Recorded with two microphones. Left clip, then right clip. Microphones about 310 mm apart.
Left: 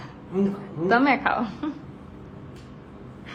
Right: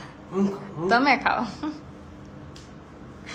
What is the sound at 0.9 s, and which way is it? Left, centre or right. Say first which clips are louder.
Speech: even; centre.